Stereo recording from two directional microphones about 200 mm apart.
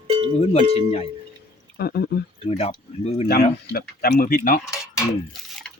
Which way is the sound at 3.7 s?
50° left (ahead or behind).